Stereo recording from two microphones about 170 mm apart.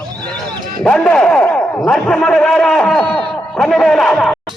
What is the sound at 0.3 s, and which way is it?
Speech, centre (ahead or behind).